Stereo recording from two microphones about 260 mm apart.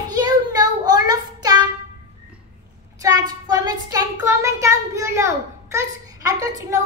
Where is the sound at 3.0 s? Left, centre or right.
Centre.